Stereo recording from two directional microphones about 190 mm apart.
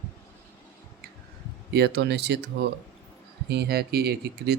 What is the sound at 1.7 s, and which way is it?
Speech, 60° right (ahead or behind).